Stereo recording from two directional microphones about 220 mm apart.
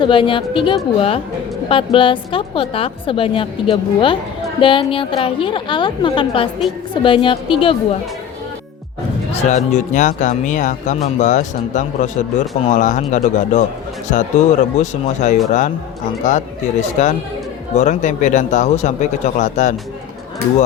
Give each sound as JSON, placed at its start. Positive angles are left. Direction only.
{"t": 0.0, "sound": "a woman's voice", "side_deg": 25}
{"t": 9.3, "sound": "speech", "side_deg": 30}
{"t": 17.0, "sound": "speech", "side_deg": 35}